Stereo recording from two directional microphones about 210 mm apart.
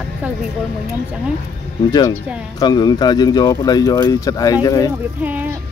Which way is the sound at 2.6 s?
20° left (ahead or behind).